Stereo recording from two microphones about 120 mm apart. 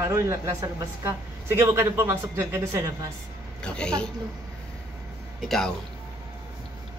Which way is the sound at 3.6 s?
10° left (ahead or behind).